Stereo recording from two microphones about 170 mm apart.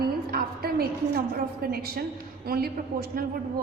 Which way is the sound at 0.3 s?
65° right (ahead or behind).